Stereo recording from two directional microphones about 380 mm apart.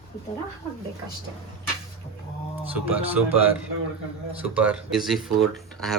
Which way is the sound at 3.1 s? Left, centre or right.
Centre.